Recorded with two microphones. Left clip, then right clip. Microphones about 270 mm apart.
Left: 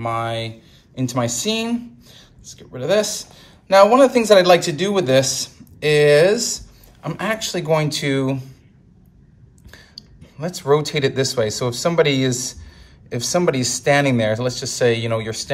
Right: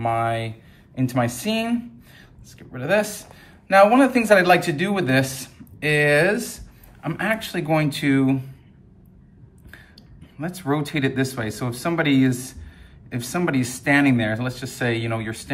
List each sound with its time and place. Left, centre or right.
0.0 s speech: centre
10.6 s speech: centre